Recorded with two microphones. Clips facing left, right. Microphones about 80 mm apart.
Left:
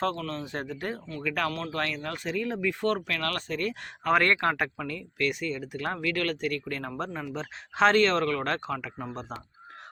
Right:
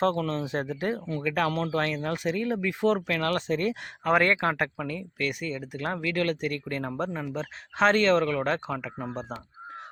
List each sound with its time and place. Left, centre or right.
0.0 s speech: centre
4.0 s speech: centre